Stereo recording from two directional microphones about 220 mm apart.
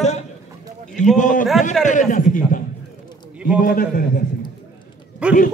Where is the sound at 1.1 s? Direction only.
35° left (ahead or behind).